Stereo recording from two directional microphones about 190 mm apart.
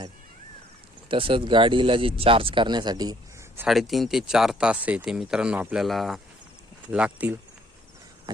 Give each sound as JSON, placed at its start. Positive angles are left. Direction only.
{"t": 1.0, "sound": "speech", "side_deg": -25}
{"t": 3.6, "sound": "speech", "side_deg": 0}